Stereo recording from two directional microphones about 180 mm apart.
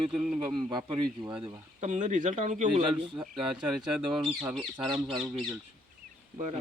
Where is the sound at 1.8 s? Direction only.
40° right (ahead or behind).